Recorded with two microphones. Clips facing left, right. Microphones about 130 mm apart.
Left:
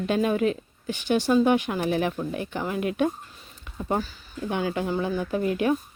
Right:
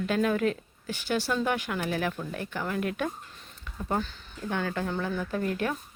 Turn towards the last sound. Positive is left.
turn(degrees=15)  # may be behind; listen again after turning